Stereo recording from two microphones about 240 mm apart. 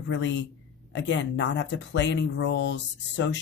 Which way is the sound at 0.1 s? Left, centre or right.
Left.